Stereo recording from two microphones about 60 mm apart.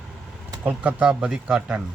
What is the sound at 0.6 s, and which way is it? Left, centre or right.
Speech, right.